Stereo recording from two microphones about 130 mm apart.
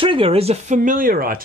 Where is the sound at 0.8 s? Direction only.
90° right.